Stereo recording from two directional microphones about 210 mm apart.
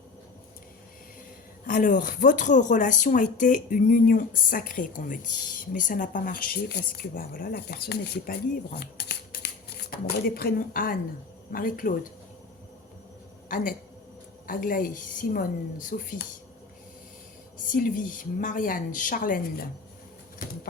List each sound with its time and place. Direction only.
1.6 s speech: 40° left (ahead or behind)
14.4 s speech: 40° left (ahead or behind)
17.7 s speech: 40° left (ahead or behind)